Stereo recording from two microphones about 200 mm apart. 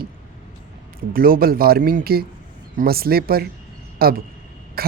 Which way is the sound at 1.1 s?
45° right (ahead or behind).